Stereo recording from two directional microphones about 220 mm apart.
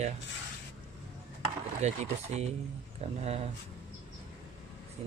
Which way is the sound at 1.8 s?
30° right (ahead or behind).